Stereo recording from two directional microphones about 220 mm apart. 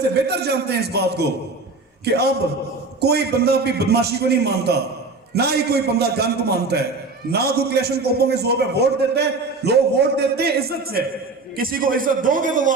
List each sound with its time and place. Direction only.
0.1 s a man's voice: 50° right (ahead or behind)